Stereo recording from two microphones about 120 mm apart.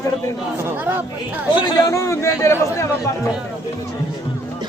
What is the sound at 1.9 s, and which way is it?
A man's voice, 25° left (ahead or behind).